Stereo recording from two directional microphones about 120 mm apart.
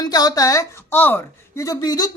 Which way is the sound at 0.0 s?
35° left (ahead or behind).